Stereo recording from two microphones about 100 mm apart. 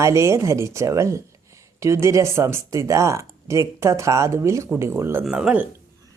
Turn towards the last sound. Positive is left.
turn(degrees=-10)  # may be behind; listen again after turning